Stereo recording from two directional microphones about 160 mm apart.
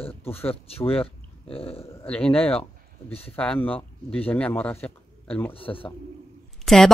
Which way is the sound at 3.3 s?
5° left (ahead or behind).